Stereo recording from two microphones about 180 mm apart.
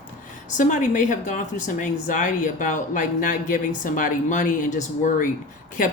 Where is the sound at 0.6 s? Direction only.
45° left (ahead or behind).